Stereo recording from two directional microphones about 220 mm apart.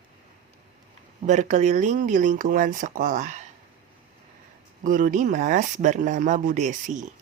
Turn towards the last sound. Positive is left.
turn(degrees=-35)  # may be behind; listen again after turning